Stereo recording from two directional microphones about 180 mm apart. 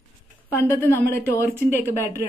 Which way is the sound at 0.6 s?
15° left (ahead or behind).